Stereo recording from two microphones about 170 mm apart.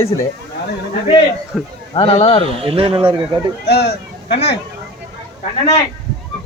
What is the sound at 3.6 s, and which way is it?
Speech, 75° left (ahead or behind).